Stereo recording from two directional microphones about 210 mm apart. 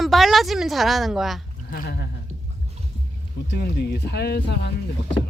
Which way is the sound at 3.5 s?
50° left (ahead or behind).